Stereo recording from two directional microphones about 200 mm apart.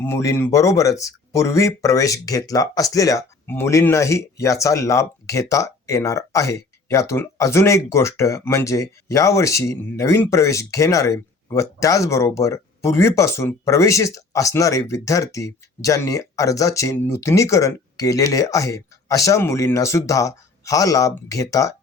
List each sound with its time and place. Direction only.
0.0 s speech: 15° left (ahead or behind)